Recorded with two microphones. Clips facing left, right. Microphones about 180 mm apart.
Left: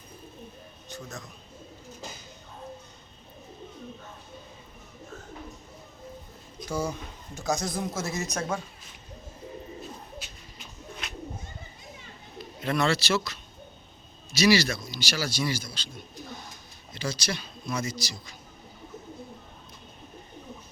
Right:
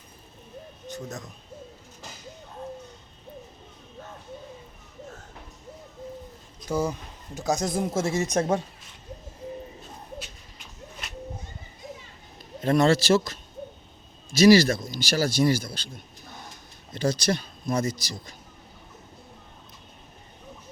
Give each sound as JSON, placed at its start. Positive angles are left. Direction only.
{"t": 0.9, "sound": "bird", "side_deg": -40}
{"t": 6.7, "sound": "speech", "side_deg": -15}
{"t": 12.5, "sound": "speech", "side_deg": -45}
{"t": 16.9, "sound": "speech", "side_deg": -55}